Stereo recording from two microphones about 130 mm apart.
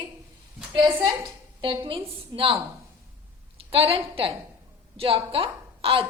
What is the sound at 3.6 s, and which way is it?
A woman's voice, 45° right (ahead or behind).